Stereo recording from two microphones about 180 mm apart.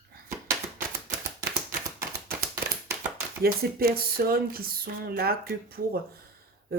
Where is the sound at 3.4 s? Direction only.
55° right (ahead or behind).